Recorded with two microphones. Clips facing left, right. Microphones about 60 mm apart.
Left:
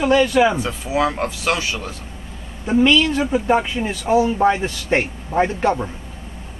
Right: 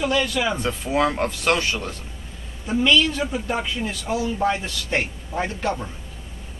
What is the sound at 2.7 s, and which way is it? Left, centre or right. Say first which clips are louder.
Speech: left 4 dB; left.